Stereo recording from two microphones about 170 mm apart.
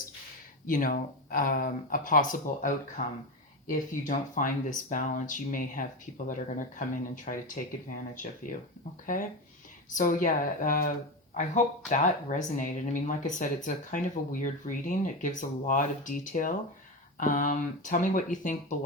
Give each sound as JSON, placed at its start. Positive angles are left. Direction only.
{"t": 0.7, "sound": "speech", "side_deg": 55}
{"t": 7.3, "sound": "speech", "side_deg": 50}